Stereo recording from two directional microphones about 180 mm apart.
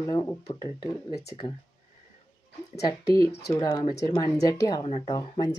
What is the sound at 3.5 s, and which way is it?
Speech, 25° left (ahead or behind).